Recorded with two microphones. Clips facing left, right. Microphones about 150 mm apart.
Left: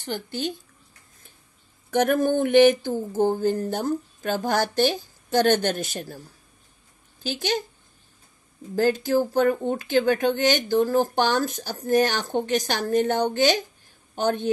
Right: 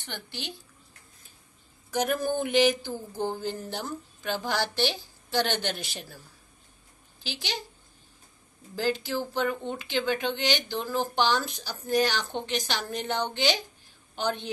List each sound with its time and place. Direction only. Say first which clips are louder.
0.0 s speech: left 10 dB; 45° left (ahead or behind)
1.9 s speech: left 7 dB; 55° left (ahead or behind)
7.2 s speech: left 10 dB; 45° left (ahead or behind)
8.7 s speech: left 8 dB; 45° left (ahead or behind)